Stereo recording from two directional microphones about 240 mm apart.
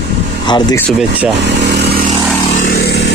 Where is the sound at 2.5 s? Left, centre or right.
Left.